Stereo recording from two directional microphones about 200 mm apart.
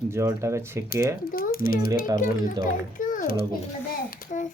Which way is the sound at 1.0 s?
45° left (ahead or behind).